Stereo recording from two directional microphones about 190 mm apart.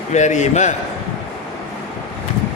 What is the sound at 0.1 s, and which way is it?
Speech, 40° left (ahead or behind).